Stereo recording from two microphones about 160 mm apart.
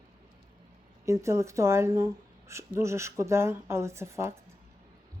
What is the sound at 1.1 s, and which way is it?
Speech, 20° right (ahead or behind).